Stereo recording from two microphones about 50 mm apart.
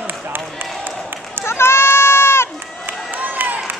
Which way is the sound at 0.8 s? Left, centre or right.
Right.